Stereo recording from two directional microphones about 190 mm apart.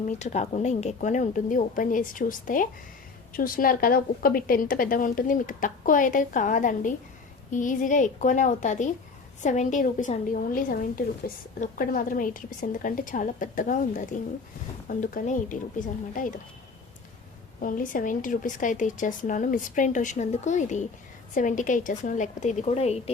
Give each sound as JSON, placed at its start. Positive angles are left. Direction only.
{"t": 0.0, "sound": "a woman's voice", "side_deg": 40}
{"t": 17.6, "sound": "a woman's voice", "side_deg": 45}